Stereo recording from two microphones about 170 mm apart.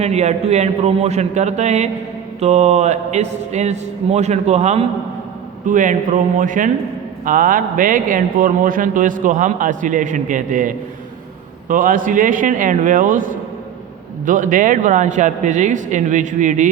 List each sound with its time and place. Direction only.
0.0 s a man's voice: 40° right (ahead or behind)